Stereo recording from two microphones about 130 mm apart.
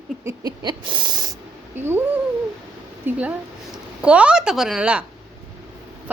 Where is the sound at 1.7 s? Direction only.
15° right (ahead or behind).